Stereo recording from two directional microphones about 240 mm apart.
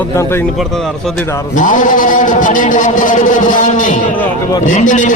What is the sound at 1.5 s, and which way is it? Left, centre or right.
Speech, left.